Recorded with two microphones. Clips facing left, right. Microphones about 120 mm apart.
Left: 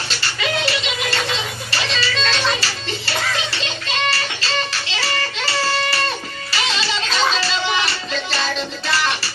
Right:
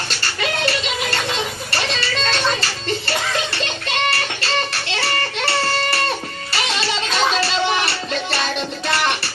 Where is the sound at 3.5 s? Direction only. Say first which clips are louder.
Right 2 dB; 55° right (ahead or behind).